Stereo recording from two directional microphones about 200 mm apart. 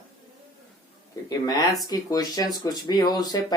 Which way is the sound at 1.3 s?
15° left (ahead or behind).